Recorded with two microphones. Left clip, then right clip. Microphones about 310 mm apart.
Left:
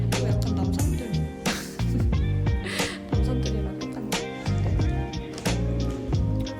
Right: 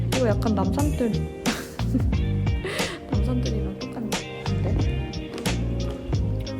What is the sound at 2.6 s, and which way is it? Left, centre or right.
Music, centre.